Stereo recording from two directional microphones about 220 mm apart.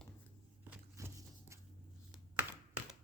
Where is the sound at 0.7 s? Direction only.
10° right (ahead or behind).